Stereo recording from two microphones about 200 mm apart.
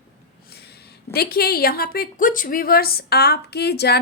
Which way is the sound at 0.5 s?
55° left (ahead or behind).